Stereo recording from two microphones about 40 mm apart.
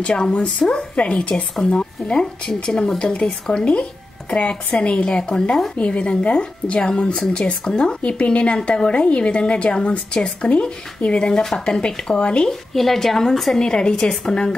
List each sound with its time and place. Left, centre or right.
0.0 s speech: centre
12.4 s a woman's voice: centre
13.6 s speech: left